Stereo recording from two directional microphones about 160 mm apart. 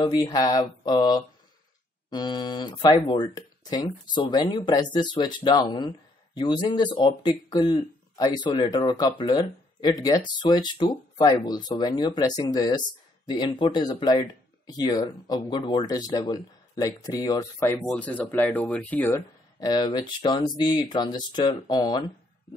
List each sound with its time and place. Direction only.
0.0 s speech: 25° left (ahead or behind)
17.7 s speech: 5° left (ahead or behind); by 22.0 s 25° left (ahead or behind)